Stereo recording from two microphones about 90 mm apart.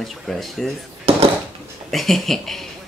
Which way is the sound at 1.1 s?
90° right.